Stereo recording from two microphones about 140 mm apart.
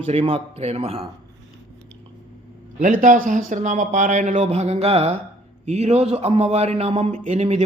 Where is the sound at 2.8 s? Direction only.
70° right (ahead or behind).